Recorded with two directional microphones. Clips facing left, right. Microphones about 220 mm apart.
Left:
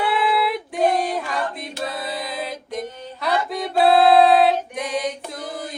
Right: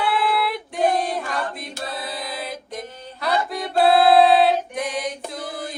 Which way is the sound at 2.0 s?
Centre (ahead or behind).